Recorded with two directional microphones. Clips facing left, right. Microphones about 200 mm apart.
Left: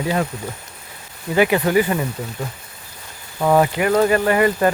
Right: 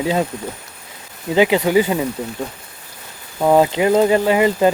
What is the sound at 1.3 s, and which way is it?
Speech, 15° right (ahead or behind).